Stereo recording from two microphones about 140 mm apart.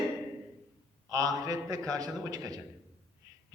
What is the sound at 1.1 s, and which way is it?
A man's voice, 25° right (ahead or behind).